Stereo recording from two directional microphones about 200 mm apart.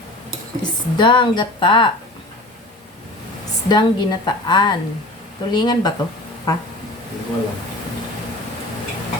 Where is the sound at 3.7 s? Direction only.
20° left (ahead or behind).